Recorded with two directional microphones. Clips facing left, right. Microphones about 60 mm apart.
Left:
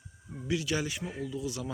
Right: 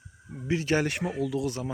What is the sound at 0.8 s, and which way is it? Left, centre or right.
Speech, right.